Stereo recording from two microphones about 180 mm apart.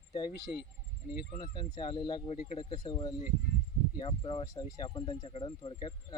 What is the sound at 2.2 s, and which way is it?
Speech, 35° left (ahead or behind).